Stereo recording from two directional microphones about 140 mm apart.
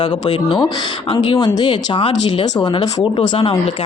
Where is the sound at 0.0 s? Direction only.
35° left (ahead or behind).